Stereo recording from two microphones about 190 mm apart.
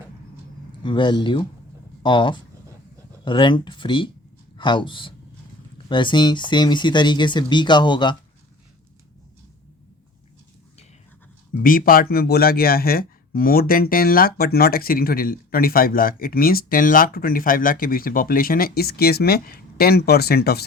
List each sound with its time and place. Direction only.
0.8 s a man's voice: 25° left (ahead or behind)
11.6 s speech: 50° left (ahead or behind)